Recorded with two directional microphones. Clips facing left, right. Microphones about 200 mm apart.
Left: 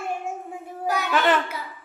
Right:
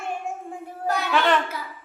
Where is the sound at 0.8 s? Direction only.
5° left (ahead or behind).